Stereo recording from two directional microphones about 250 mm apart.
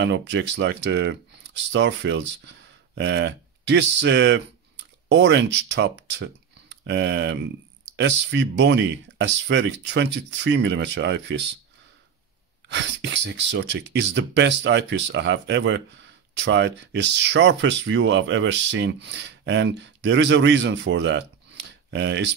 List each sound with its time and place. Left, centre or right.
0.0 s speech: right
12.6 s speech: right